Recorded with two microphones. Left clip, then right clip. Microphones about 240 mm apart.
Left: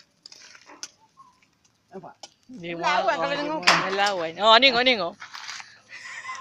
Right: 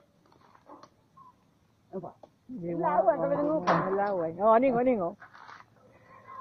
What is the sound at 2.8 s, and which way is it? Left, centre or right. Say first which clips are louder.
Speech: left 2 dB; centre.